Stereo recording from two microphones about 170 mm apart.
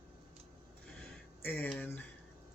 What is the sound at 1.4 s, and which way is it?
Speech, 10° left (ahead or behind).